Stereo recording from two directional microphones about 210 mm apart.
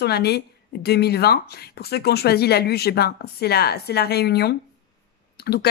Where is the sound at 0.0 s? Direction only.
50° left (ahead or behind).